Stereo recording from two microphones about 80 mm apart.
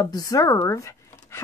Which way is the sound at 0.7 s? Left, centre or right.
Left.